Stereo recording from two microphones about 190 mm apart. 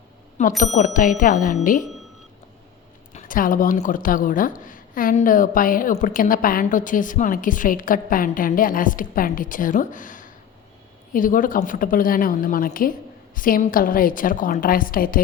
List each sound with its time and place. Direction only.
0.6 s speech: 40° left (ahead or behind)
3.1 s speech: 40° left (ahead or behind)